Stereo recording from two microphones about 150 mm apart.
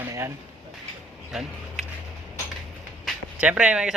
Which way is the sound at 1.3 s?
Centre (ahead or behind).